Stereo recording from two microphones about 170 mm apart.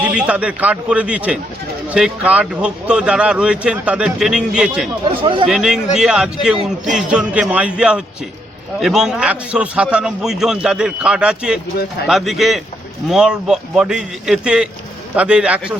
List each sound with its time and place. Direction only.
0.0 s a man's voice: 5° right (ahead or behind)
5.2 s speech: 30° right (ahead or behind)
5.5 s a man's voice: 5° right (ahead or behind)